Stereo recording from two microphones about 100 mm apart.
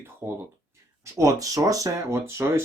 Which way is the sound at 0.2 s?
25° right (ahead or behind).